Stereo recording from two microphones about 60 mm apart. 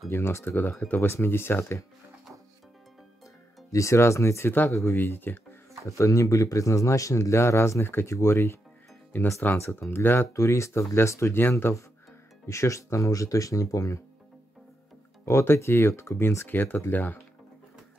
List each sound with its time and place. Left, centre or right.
0.1 s speech: left
3.7 s speech: left
4.9 s speech: left
5.9 s speech: left
9.1 s speech: left
9.6 s speech: left
9.8 s speech: left
10.3 s speech: left
12.4 s speech: left
15.2 s speech: left